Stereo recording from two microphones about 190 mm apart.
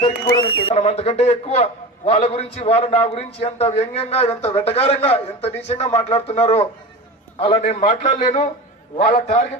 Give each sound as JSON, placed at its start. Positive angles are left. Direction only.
{"t": 0.3, "sound": "a man's voice", "side_deg": 25}